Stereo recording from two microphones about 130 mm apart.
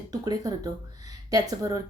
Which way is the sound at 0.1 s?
30° right (ahead or behind).